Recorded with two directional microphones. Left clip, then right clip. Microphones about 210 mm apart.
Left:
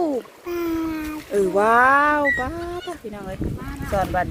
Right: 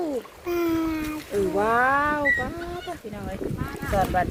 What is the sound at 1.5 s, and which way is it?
Speech, 55° left (ahead or behind).